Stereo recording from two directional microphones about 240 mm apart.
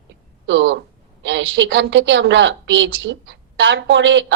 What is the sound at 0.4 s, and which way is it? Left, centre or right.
A woman's voice, right.